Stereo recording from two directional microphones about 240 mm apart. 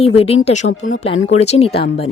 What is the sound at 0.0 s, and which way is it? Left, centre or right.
Speech, left.